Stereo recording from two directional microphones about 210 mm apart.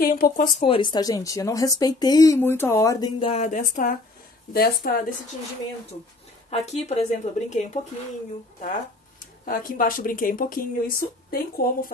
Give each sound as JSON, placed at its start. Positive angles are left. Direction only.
{"t": 0.0, "sound": "speech", "side_deg": 45}
{"t": 0.6, "sound": "speech", "side_deg": 25}
{"t": 3.3, "sound": "speech", "side_deg": 35}
{"t": 6.5, "sound": "speech", "side_deg": 30}
{"t": 9.5, "sound": "speech", "side_deg": 40}